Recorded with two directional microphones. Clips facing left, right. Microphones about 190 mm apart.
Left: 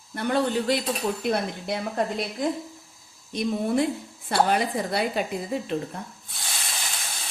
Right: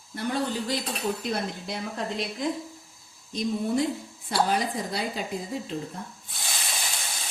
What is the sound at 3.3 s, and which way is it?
A woman's voice, 60° left (ahead or behind).